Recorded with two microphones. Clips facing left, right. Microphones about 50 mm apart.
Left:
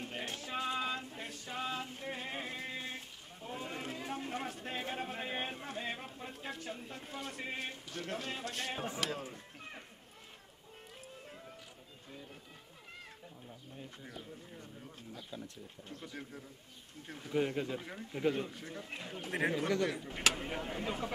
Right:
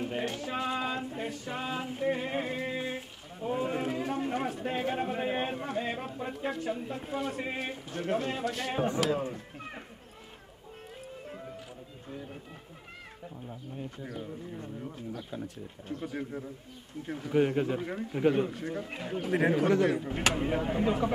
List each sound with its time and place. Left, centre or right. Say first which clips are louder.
0.0 s a sound: right 9 dB; centre
6.0 s a man's voice: right 10 dB; centre
8.8 s speech: right 10 dB; centre
9.3 s speech: right 7 dB; right
14.6 s a man's voice: right 11 dB; right